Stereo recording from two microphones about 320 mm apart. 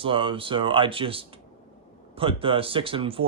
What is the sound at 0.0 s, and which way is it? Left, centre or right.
Speech, centre.